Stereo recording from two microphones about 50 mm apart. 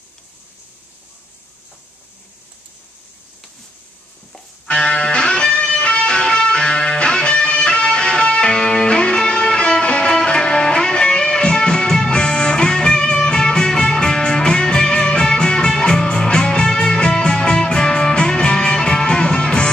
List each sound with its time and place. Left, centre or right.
4.7 s music: centre